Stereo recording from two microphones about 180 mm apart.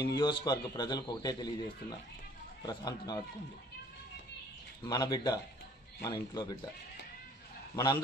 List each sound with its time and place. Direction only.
0.0 s a man's voice: 25° left (ahead or behind)
4.8 s a man's voice: 20° left (ahead or behind)
7.7 s a man's voice: 20° left (ahead or behind)